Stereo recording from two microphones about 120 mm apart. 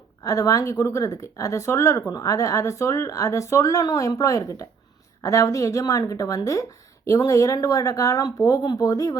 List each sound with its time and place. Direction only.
0.2 s speech: 30° left (ahead or behind)